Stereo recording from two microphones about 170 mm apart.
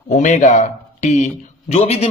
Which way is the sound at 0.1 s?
45° left (ahead or behind).